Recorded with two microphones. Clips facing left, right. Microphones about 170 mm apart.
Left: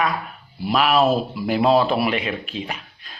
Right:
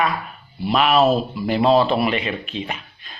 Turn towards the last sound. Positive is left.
turn(degrees=0)  # may be behind; listen again after turning